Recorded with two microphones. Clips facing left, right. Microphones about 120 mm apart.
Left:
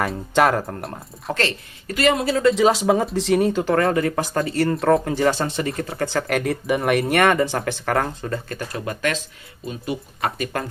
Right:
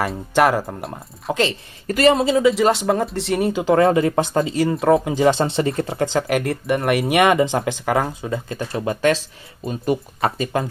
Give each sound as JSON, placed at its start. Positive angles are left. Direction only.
{"t": 0.0, "sound": "speech", "side_deg": 0}
{"t": 1.9, "sound": "speech", "side_deg": -40}
{"t": 2.1, "sound": "speech", "side_deg": -20}
{"t": 2.4, "sound": "speech", "side_deg": 0}
{"t": 4.5, "sound": "speech", "side_deg": -10}
{"t": 5.9, "sound": "speech", "side_deg": -20}
{"t": 6.2, "sound": "speech", "side_deg": 0}
{"t": 7.1, "sound": "speech", "side_deg": -15}
{"t": 8.7, "sound": "speech", "side_deg": -30}
{"t": 10.2, "sound": "speech", "side_deg": -30}